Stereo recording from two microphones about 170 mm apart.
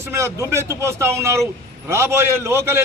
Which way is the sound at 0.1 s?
15° right (ahead or behind).